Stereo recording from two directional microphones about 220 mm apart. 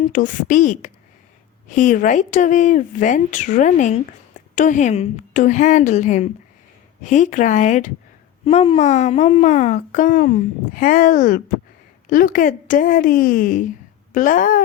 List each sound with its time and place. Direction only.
0.1 s a woman's voice: 35° left (ahead or behind)